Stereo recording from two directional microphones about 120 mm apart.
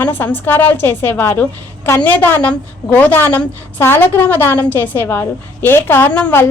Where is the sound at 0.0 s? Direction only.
15° left (ahead or behind).